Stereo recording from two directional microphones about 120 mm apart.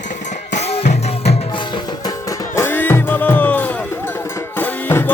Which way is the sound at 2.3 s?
20° left (ahead or behind).